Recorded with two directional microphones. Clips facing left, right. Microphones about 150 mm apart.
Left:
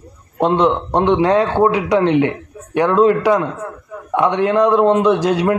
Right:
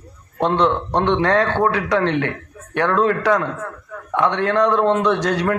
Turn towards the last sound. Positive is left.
turn(degrees=15)  # may be behind; listen again after turning